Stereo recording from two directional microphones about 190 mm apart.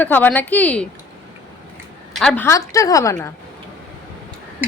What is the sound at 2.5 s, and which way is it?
Speech, 15° left (ahead or behind).